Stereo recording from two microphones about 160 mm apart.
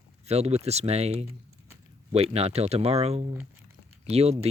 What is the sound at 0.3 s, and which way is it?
Speech, 40° right (ahead or behind).